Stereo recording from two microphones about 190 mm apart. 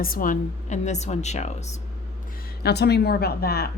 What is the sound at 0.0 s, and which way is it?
Speech, 45° left (ahead or behind).